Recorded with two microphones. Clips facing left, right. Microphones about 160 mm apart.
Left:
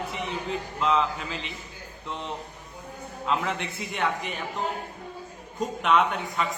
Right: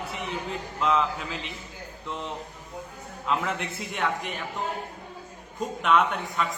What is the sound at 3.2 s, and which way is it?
A man's voice, centre (ahead or behind).